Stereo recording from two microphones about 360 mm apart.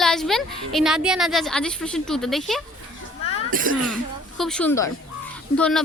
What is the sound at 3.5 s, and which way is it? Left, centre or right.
Speech, right.